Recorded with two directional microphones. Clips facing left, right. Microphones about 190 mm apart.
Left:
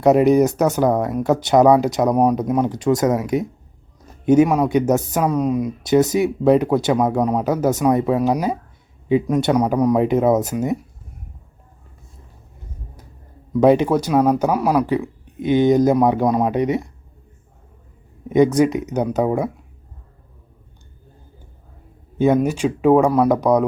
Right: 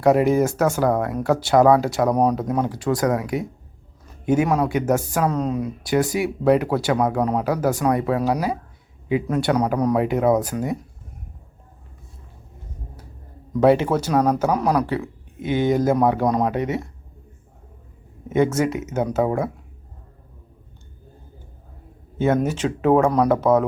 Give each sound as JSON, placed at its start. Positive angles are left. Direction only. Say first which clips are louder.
{"t": 0.0, "sound": "speech", "louder": "left 3 dB", "side_deg": 20}
{"t": 13.5, "sound": "speech", "louder": "left 2 dB", "side_deg": 15}
{"t": 18.3, "sound": "speech", "louder": "left 5 dB", "side_deg": 15}
{"t": 22.4, "sound": "speech", "louder": "left 3 dB", "side_deg": 15}